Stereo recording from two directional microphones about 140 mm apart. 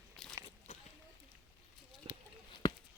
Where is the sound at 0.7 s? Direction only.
55° left (ahead or behind).